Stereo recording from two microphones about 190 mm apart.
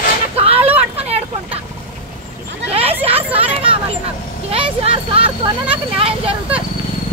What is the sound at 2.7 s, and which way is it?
Hubbub, 30° right (ahead or behind).